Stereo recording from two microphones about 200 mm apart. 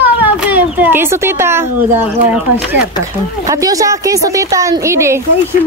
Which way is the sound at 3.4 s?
15° right (ahead or behind).